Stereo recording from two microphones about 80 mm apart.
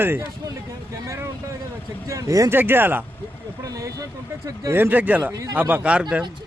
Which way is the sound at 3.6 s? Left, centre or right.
Right.